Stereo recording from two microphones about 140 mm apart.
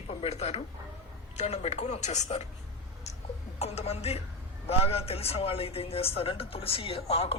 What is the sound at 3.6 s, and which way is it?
A man's voice, 50° left (ahead or behind).